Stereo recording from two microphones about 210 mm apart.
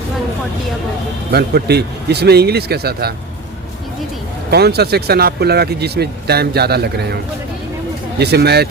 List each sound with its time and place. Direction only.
1.3 s speech: 50° right (ahead or behind)
4.5 s speech: 50° right (ahead or behind)
8.2 s speech: 50° right (ahead or behind)